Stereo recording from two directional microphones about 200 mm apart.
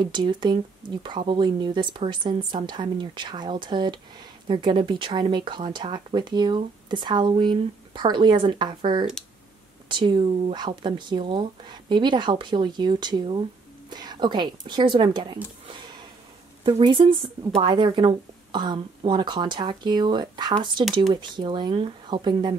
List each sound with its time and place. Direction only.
0.0 s speech: 20° right (ahead or behind)
15.6 s a sound: 25° right (ahead or behind)
16.6 s speech: 25° right (ahead or behind)